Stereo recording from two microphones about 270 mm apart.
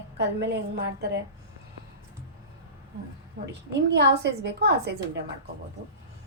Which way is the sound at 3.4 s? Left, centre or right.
Right.